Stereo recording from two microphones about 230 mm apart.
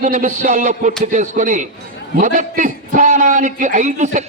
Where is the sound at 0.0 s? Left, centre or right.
Right.